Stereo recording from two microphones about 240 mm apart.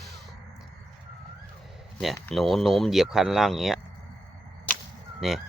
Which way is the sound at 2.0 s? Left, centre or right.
Centre.